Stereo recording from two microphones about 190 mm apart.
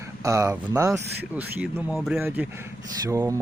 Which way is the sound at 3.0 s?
15° right (ahead or behind).